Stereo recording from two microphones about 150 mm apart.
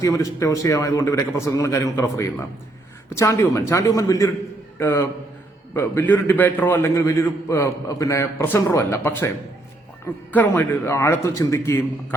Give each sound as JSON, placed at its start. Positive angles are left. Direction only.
{"t": 0.0, "sound": "a man's voice", "side_deg": 20}
{"t": 10.3, "sound": "a man's voice", "side_deg": 15}